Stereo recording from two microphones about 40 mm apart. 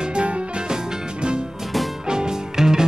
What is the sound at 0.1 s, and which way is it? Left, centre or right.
Music, right.